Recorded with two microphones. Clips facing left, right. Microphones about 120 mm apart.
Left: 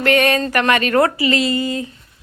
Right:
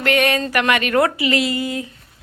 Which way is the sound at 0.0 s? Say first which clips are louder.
Left 2 dB; 5° right (ahead or behind).